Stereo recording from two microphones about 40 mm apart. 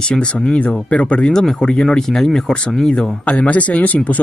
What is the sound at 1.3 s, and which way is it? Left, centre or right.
Speech, centre.